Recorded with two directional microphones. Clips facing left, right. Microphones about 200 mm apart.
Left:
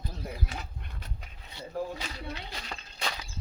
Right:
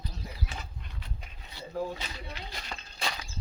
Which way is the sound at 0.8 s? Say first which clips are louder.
Left 1 dB; 50° left (ahead or behind).